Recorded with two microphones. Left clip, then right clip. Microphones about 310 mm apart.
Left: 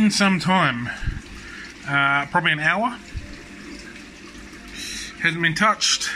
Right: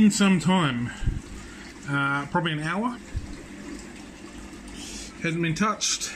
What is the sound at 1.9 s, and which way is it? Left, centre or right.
A man's voice, centre.